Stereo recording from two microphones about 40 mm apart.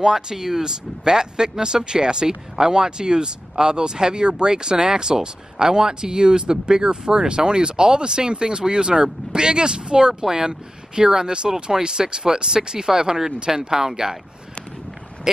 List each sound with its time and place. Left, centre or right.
0.0 s speech: centre